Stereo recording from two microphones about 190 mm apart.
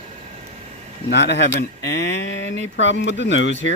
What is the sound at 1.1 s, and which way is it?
Speech, 65° left (ahead or behind).